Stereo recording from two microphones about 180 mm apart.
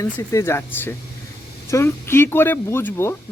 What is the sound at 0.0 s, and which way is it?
Speech, 15° left (ahead or behind).